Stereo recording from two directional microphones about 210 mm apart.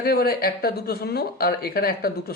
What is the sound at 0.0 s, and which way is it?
Speech, 45° left (ahead or behind).